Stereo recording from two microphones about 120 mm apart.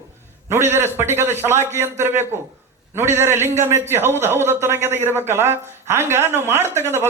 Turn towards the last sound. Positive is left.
turn(degrees=-20)  # may be behind; listen again after turning